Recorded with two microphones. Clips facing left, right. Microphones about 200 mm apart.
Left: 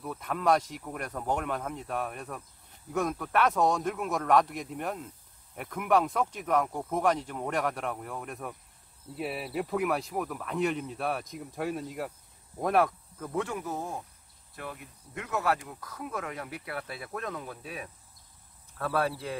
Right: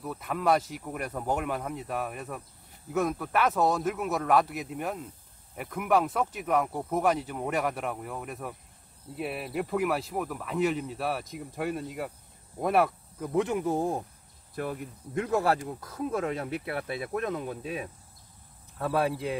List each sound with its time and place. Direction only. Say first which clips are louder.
0.0 s speech: right 1 dB; centre (ahead or behind)
13.3 s speech: right 6 dB; 20° right (ahead or behind)